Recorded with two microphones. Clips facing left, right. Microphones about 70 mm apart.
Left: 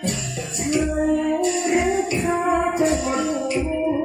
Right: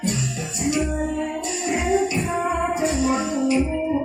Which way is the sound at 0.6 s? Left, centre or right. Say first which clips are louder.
Left 3 dB; left.